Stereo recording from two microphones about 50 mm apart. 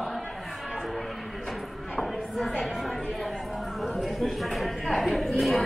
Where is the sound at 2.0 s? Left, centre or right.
Centre.